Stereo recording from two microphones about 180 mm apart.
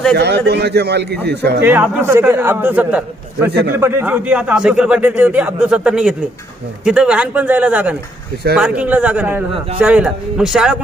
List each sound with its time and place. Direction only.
0.2 s a man's voice: 65° right (ahead or behind)
1.6 s a man's voice: 10° right (ahead or behind)